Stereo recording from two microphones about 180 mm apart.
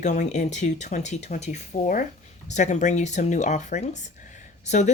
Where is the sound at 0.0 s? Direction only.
40° left (ahead or behind).